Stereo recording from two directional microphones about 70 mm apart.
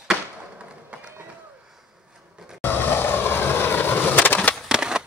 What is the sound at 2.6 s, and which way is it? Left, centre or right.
Skateboard, left.